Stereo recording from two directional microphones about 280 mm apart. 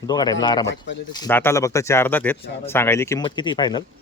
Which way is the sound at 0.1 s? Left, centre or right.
Centre.